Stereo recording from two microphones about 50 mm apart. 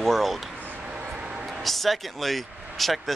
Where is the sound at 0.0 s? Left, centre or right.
Centre.